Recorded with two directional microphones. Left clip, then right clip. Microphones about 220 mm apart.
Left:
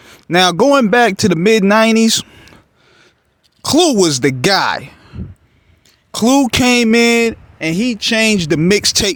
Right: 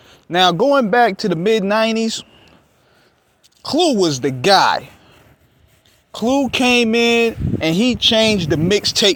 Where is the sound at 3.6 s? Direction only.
45° left (ahead or behind).